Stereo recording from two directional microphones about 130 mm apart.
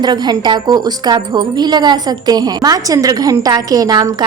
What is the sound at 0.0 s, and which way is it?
A woman's voice, 35° right (ahead or behind).